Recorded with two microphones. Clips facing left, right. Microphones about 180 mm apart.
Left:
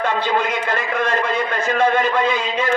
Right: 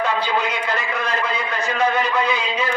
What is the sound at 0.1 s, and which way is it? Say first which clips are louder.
A man's voice: left 2 dB; 50° left (ahead or behind).